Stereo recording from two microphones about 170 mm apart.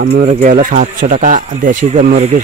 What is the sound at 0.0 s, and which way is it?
Speech, 75° right (ahead or behind).